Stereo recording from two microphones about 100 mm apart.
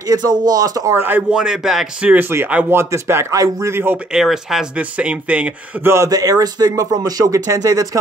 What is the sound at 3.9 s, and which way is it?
Speech, 5° right (ahead or behind).